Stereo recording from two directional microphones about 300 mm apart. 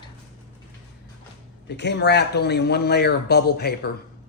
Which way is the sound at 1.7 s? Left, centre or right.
Left.